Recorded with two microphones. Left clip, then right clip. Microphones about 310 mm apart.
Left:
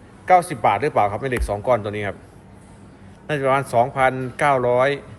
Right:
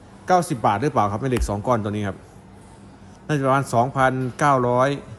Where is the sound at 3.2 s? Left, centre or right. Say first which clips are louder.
Left 1 dB; right.